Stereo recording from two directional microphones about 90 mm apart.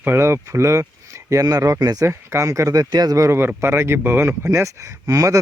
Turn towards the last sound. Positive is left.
turn(degrees=-40)  # may be behind; listen again after turning